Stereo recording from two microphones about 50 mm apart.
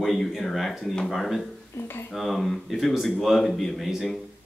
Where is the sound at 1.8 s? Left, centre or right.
Left.